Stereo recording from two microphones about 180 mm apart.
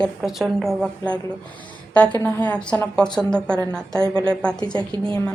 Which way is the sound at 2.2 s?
10° left (ahead or behind).